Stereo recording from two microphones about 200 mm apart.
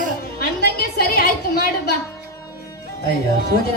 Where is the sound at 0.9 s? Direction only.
50° left (ahead or behind).